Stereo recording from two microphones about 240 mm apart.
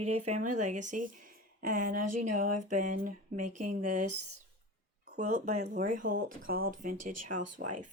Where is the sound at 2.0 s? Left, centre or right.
Right.